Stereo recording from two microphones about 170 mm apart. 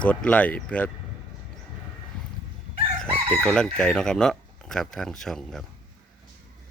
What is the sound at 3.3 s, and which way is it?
Speech, 5° left (ahead or behind).